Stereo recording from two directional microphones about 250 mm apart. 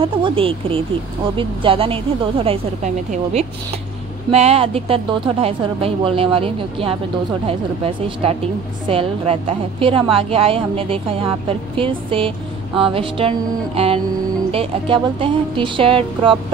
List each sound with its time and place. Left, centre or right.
0.0 s a woman's voice: right
14.5 s a woman's voice: right